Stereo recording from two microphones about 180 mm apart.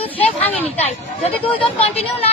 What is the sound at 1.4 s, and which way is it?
Speech, 30° left (ahead or behind).